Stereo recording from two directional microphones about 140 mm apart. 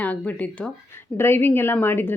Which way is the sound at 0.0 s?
10° left (ahead or behind).